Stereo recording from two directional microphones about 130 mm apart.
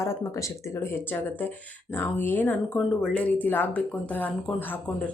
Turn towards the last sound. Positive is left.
turn(degrees=10)  # may be behind; listen again after turning